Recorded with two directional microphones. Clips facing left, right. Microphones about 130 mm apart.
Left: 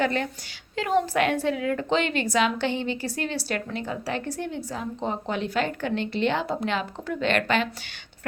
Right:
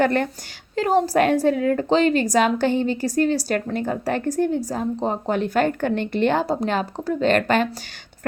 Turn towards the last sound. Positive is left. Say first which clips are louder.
# right 5 dB
turn(degrees=-45)  # may be behind; listen again after turning